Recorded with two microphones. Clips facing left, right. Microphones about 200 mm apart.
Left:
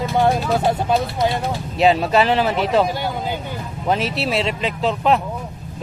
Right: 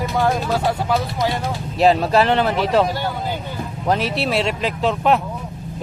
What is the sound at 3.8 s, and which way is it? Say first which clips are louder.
Speech: right 1 dB; centre (ahead or behind).